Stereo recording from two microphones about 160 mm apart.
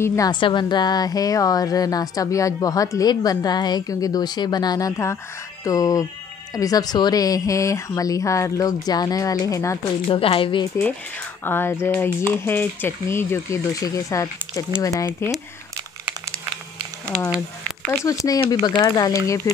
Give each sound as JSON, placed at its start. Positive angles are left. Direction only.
{"t": 0.0, "sound": "speech", "side_deg": 20}
{"t": 0.3, "sound": "speech", "side_deg": 30}
{"t": 10.0, "sound": "a woman's voice", "side_deg": 35}
{"t": 11.4, "sound": "speech", "side_deg": 15}
{"t": 18.2, "sound": "speech", "side_deg": 25}